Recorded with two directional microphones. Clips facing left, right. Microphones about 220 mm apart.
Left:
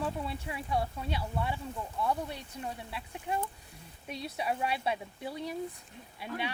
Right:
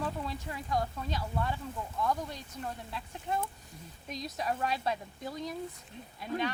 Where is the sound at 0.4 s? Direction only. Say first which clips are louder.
Even; 10° left (ahead or behind).